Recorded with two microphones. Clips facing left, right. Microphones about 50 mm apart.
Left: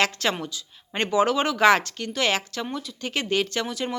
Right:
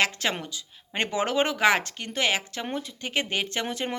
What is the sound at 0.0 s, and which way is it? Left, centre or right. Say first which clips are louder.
A woman's voice: left 2 dB; centre.